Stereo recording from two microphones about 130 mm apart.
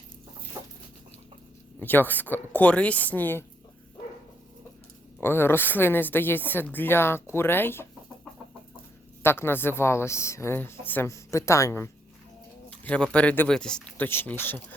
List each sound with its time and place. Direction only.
0.6 s chicken: 20° right (ahead or behind)
1.8 s a woman's voice: 15° left (ahead or behind)
5.2 s a woman's voice: 20° left (ahead or behind)
9.2 s speech: 20° left (ahead or behind)
12.7 s a woman's voice: 10° left (ahead or behind)